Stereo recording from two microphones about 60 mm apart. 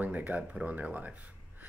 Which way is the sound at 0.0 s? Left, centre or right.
Right.